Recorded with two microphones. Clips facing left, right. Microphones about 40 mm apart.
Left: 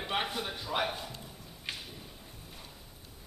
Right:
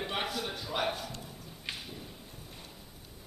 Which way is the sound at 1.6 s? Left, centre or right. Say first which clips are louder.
Even; centre.